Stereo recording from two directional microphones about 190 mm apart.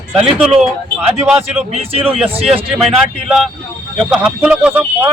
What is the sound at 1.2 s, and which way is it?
Speech, 5° right (ahead or behind).